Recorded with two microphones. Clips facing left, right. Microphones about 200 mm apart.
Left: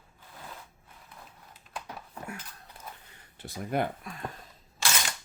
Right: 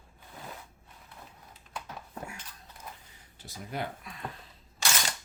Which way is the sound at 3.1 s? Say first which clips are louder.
Left 6 dB; 55° left (ahead or behind).